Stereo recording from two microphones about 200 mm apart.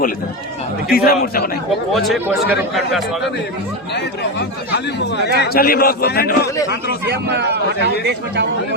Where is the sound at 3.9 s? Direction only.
55° left (ahead or behind).